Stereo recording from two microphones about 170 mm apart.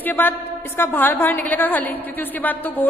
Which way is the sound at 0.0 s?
10° left (ahead or behind).